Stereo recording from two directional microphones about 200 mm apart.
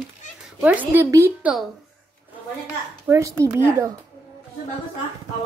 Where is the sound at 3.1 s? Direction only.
15° right (ahead or behind).